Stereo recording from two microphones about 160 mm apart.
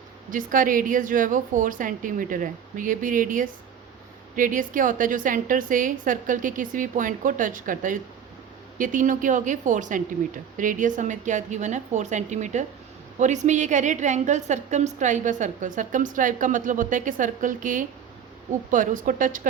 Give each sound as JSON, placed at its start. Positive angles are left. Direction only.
{"t": 0.3, "sound": "a woman's voice", "side_deg": -55}